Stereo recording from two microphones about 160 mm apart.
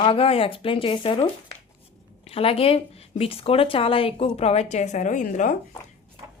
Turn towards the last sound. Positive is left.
turn(degrees=50)  # may be behind; listen again after turning